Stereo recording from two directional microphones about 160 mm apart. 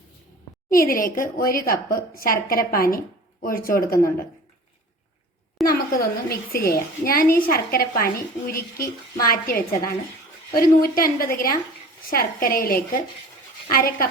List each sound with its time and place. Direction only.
0.7 s a woman's voice: 60° left (ahead or behind)
5.6 s a woman's voice: 70° left (ahead or behind)